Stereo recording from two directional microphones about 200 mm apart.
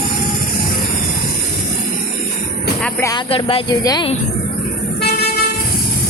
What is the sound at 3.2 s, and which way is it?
Speech, 25° left (ahead or behind).